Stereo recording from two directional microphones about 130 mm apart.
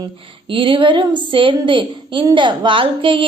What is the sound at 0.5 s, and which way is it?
A woman's voice, 40° right (ahead or behind).